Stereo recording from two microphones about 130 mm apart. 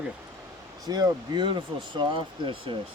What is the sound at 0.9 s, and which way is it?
Speech, 30° right (ahead or behind).